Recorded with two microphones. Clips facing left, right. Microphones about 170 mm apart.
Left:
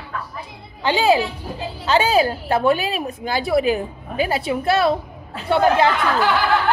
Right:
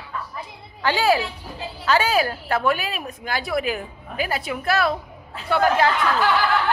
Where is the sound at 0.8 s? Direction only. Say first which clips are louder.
Left 3 dB; 20° left (ahead or behind).